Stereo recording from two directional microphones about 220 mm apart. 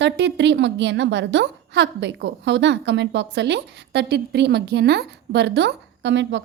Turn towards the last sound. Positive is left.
turn(degrees=-55)  # may be behind; listen again after turning